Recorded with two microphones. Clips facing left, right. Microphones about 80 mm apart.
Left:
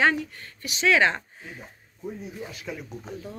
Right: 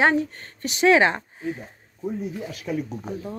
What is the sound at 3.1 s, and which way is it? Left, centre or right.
Speech, right.